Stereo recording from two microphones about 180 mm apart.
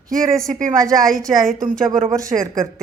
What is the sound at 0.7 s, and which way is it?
Speech, 20° right (ahead or behind).